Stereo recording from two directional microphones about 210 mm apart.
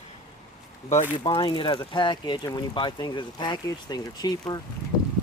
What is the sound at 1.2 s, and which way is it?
Speech, 20° left (ahead or behind).